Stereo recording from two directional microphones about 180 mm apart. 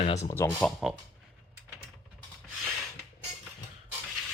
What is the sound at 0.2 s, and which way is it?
Speech, 20° left (ahead or behind).